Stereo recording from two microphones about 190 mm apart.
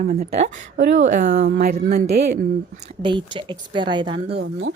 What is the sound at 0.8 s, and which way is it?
Speech, 65° right (ahead or behind).